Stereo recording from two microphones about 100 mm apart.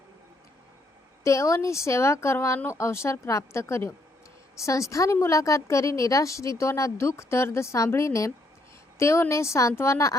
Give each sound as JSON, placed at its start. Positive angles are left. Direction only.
{"t": 1.2, "sound": "a woman's voice", "side_deg": 30}